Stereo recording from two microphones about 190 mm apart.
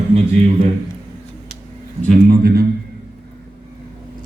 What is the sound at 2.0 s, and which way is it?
Speech, 50° right (ahead or behind).